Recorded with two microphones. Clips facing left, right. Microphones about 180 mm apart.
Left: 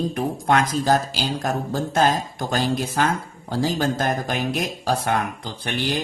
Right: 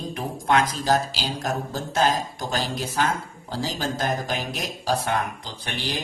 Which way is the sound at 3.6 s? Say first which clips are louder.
Left 5 dB; 55° left (ahead or behind).